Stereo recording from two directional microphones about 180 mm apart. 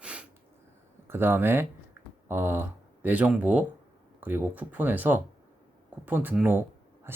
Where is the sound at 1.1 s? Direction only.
10° right (ahead or behind).